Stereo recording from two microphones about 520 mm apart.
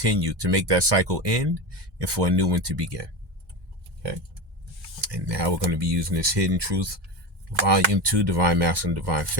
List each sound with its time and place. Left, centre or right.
0.0 s speech: right
4.9 s speech: right